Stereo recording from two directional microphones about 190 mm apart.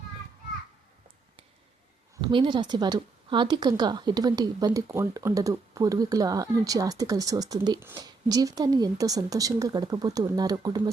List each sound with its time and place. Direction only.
2.2 s speech: 25° right (ahead or behind)